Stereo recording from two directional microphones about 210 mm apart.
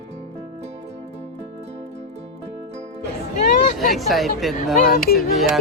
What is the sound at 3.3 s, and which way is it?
Hubbub, 40° left (ahead or behind).